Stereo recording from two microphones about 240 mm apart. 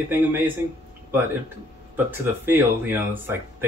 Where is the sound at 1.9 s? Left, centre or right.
Centre.